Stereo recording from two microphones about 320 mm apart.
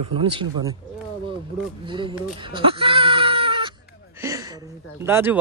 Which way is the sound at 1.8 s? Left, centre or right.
Centre.